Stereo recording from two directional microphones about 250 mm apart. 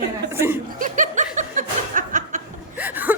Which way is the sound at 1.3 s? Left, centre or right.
Right.